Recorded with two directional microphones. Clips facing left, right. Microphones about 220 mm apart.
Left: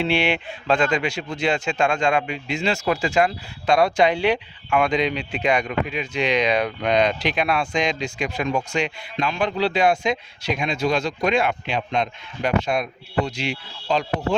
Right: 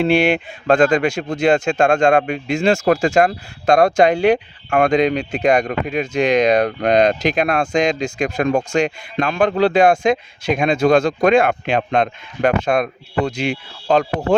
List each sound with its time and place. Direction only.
0.0 s speech: 45° right (ahead or behind)